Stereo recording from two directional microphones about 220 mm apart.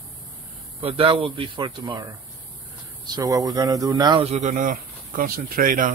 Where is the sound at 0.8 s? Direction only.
25° right (ahead or behind).